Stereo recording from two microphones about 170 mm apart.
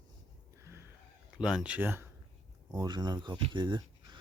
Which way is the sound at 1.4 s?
5° right (ahead or behind).